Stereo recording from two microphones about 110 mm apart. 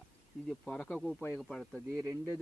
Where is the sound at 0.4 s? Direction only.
5° left (ahead or behind).